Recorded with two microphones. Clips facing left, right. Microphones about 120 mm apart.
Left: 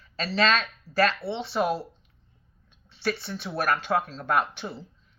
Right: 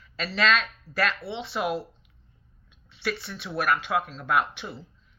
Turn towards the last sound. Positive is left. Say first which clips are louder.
# even
turn(degrees=35)  # may be behind; listen again after turning